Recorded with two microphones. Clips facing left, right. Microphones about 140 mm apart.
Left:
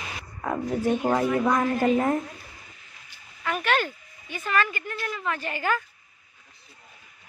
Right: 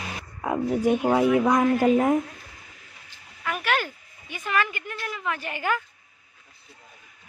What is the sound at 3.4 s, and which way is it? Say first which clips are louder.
A woman's voice: left 1 dB; 10° right (ahead or behind).